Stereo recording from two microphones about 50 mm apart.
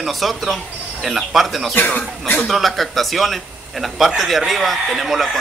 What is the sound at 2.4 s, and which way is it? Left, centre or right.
Speech, centre.